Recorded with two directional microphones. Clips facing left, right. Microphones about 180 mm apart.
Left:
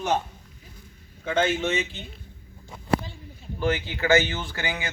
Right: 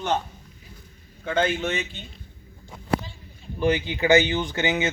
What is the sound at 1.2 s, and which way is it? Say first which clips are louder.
Speech: even; centre (ahead or behind).